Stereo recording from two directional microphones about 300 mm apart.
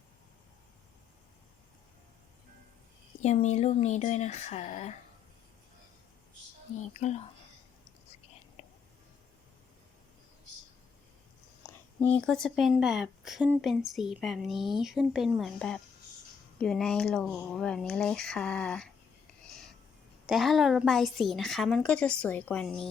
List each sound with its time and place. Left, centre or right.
3.2 s speech: left
6.7 s speech: left
11.6 s a woman's voice: centre
20.2 s a woman's voice: centre